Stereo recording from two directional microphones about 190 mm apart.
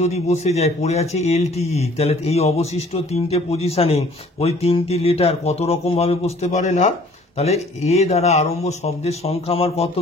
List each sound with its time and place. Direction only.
0.0 s a man's voice: 35° left (ahead or behind)